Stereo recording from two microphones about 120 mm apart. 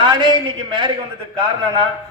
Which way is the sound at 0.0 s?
40° right (ahead or behind).